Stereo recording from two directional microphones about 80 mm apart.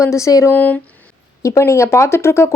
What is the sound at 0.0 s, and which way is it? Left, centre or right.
Speech, left.